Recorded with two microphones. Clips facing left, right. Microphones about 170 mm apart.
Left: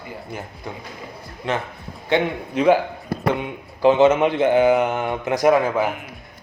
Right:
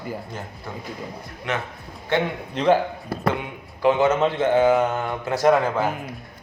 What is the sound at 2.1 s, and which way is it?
Speech, 10° left (ahead or behind).